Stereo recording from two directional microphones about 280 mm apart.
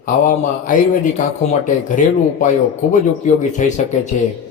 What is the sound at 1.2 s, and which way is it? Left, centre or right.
A man's voice, left.